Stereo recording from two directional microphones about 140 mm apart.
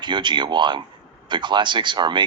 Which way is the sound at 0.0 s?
35° right (ahead or behind).